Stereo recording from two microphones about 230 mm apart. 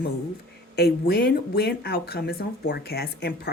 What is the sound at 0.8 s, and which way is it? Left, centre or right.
A woman's voice, left.